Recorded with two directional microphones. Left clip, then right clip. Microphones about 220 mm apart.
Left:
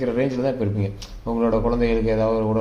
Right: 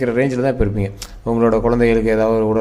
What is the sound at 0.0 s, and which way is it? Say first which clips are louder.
A man's voice: right 5 dB; 35° right (ahead or behind).